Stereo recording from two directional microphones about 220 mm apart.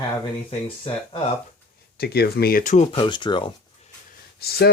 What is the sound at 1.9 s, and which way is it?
Speech, 45° left (ahead or behind).